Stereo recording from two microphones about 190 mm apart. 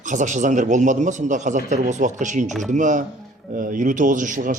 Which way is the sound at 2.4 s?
Centre (ahead or behind).